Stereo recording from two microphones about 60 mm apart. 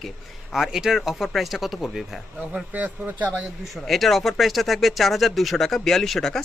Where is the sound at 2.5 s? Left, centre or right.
Right.